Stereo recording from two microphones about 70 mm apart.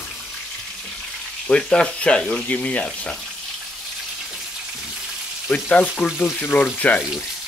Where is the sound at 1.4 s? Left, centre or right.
Centre.